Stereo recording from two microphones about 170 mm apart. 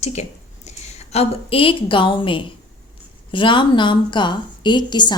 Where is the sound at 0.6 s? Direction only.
40° left (ahead or behind).